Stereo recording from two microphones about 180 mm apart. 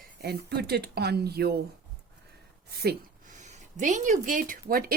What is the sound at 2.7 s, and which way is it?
Speech, 60° right (ahead or behind).